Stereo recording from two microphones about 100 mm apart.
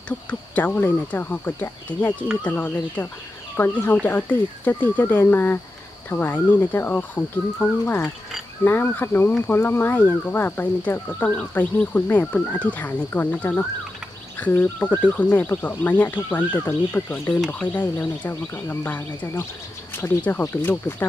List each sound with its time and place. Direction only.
0.3 s speech: 15° left (ahead or behind)